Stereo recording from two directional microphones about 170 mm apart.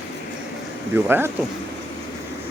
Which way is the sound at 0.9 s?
15° right (ahead or behind).